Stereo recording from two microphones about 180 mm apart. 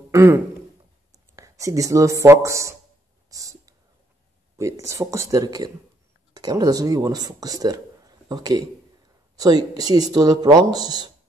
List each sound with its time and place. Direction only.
0.1 s speech: 15° right (ahead or behind)
3.3 s whispering: 20° right (ahead or behind)
4.6 s speech: 15° right (ahead or behind)